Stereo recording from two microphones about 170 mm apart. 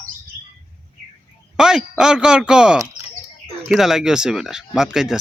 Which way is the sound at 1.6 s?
5° right (ahead or behind).